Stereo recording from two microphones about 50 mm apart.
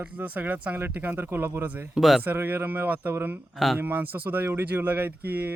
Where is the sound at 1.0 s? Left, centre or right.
Right.